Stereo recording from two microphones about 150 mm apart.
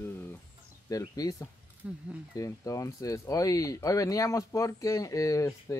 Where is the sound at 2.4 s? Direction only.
20° left (ahead or behind).